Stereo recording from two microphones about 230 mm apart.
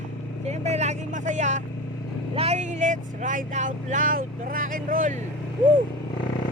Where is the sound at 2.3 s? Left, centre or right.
Right.